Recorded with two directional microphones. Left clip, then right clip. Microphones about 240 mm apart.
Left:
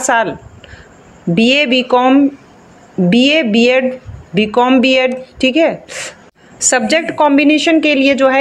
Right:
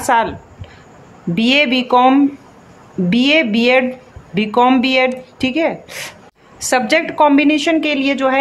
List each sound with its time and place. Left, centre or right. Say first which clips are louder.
0.0 s a woman's voice: left 1 dB; centre